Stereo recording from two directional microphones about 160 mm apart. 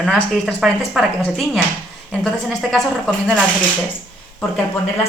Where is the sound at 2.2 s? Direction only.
Centre (ahead or behind).